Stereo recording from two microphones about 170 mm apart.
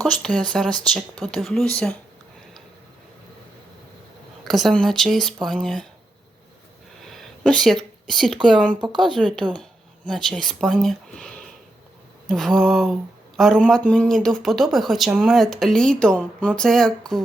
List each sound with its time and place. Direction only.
0.0 s speech: 5° left (ahead or behind)
4.4 s speech: centre (ahead or behind)
7.0 s a sound: centre (ahead or behind)
8.4 s speech: centre (ahead or behind)
8.8 s speech: 25° right (ahead or behind)
9.0 s speech: centre (ahead or behind)